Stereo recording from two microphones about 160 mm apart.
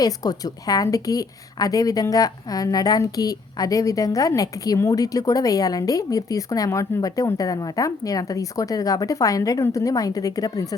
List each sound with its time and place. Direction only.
0.0 s a woman's voice: 25° left (ahead or behind)